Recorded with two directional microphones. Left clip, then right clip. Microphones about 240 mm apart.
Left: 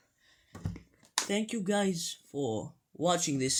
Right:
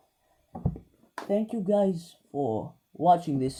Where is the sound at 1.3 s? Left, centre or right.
Centre.